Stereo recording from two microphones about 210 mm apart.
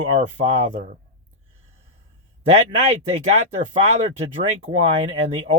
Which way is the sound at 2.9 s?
30° right (ahead or behind).